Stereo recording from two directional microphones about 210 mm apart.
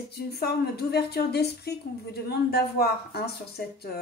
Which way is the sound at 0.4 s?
50° left (ahead or behind).